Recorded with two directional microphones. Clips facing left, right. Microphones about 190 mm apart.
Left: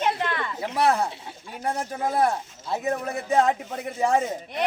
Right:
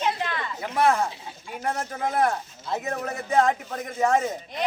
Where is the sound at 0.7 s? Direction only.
10° left (ahead or behind).